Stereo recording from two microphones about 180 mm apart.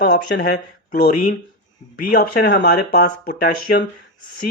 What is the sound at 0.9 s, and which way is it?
Speech, 45° left (ahead or behind).